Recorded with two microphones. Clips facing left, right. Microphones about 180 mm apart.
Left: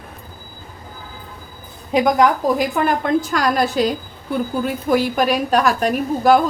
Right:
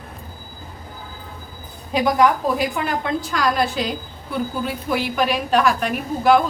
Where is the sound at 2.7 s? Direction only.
50° left (ahead or behind).